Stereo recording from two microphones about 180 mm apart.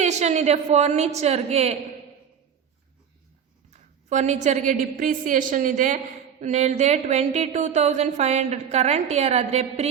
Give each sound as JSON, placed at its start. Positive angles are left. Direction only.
{"t": 0.0, "sound": "speech", "side_deg": -40}
{"t": 3.7, "sound": "a woman's voice", "side_deg": -40}